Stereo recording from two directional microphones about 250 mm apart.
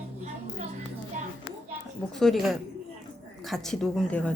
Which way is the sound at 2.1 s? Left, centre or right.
Centre.